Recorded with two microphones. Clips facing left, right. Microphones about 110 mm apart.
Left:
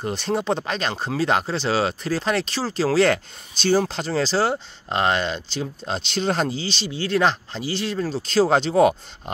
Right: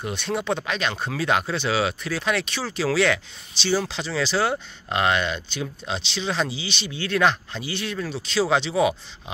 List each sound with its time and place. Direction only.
0.0 s speech: 35° left (ahead or behind)